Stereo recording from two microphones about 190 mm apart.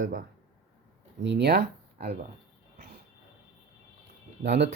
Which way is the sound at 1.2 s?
65° right (ahead or behind).